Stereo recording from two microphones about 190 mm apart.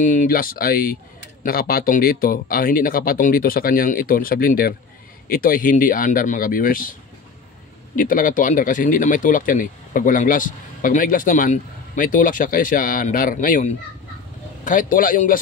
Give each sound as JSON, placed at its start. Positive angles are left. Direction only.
{"t": 0.0, "sound": "speech", "side_deg": 45}